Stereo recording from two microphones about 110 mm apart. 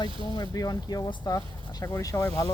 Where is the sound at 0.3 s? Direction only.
40° left (ahead or behind).